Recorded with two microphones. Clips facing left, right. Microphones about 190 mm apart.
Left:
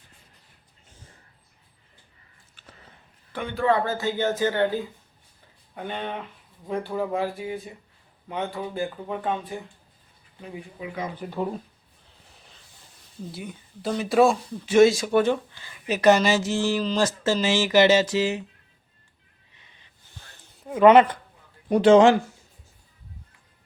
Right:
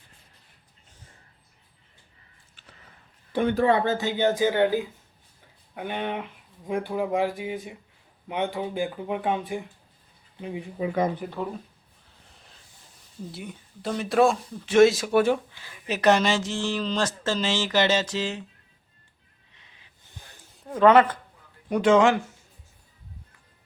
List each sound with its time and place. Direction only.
3.3 s speech: 35° right (ahead or behind)
3.7 s speech: 20° right (ahead or behind)
11.2 s speech: 5° right (ahead or behind)
13.3 s speech: centre (ahead or behind)
19.5 s a sound: centre (ahead or behind)
20.8 s speech: 20° left (ahead or behind)
21.7 s speech: 30° left (ahead or behind)